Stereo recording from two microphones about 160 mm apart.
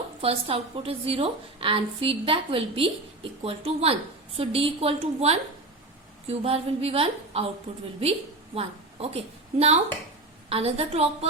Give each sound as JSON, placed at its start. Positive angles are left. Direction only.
{"t": 0.2, "sound": "a woman's voice", "side_deg": -35}
{"t": 8.5, "sound": "a woman's voice", "side_deg": -40}